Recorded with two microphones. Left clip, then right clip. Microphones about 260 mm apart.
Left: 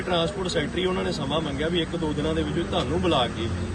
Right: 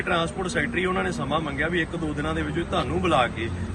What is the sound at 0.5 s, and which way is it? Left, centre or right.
Speech, centre.